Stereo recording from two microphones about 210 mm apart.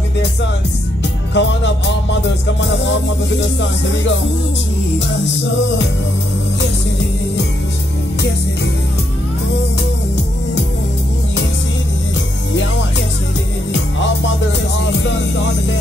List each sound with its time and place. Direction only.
1.3 s music: 60° left (ahead or behind)
15.0 s music: 55° left (ahead or behind)